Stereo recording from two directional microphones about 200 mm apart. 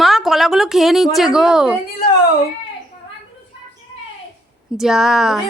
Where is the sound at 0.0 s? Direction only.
Centre (ahead or behind).